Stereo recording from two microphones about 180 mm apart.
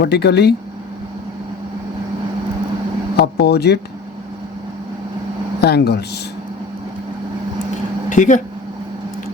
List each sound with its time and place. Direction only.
0.0 s speech: 65° left (ahead or behind)
3.2 s speech: 65° left (ahead or behind)
5.5 s speech: 65° left (ahead or behind)
8.1 s speech: 45° left (ahead or behind)